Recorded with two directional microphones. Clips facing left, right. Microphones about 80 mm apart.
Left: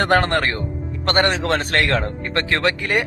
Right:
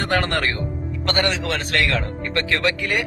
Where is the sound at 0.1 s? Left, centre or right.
Left.